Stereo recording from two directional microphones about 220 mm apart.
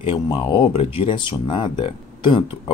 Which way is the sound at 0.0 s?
25° left (ahead or behind).